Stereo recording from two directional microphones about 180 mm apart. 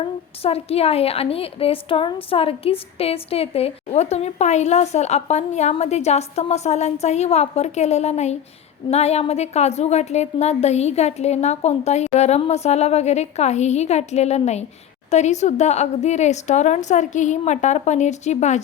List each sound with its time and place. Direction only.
0.0 s a woman's voice: 35° left (ahead or behind)